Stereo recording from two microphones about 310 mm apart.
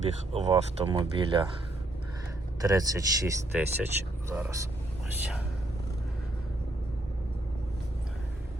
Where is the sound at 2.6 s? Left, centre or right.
Centre.